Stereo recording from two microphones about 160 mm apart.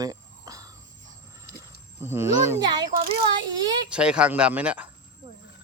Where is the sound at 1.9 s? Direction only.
15° right (ahead or behind).